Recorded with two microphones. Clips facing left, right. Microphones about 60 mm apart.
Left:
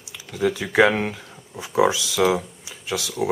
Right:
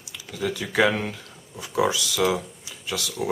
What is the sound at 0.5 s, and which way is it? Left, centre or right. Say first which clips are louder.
Speech: left 4 dB; centre.